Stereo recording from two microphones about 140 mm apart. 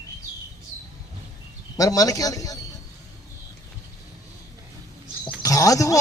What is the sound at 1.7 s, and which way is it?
Speech, 25° left (ahead or behind).